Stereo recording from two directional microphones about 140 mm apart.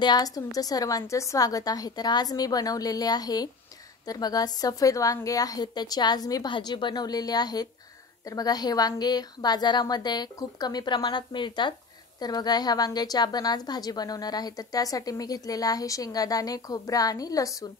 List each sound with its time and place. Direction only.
0.0 s a woman's voice: 30° left (ahead or behind)